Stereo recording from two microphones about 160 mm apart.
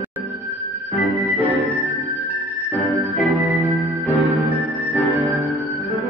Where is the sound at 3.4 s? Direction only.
20° right (ahead or behind).